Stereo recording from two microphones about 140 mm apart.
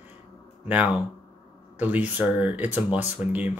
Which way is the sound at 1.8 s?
10° right (ahead or behind).